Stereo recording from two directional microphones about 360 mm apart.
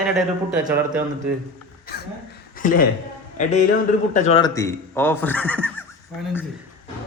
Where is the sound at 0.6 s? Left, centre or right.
Centre.